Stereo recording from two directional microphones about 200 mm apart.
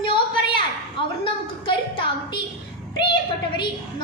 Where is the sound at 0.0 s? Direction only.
25° left (ahead or behind).